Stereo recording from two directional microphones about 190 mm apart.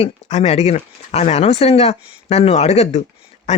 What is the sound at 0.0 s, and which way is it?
Speech, 35° left (ahead or behind).